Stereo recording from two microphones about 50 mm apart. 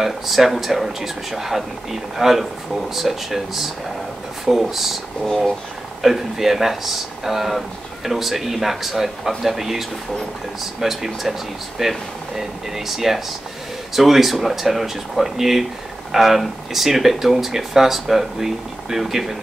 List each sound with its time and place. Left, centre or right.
0.0 s speech: centre
6.0 s speech: centre